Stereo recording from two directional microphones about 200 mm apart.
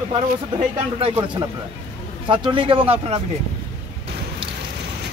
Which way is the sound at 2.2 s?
25° right (ahead or behind).